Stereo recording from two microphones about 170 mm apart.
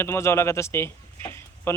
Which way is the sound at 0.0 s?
15° left (ahead or behind).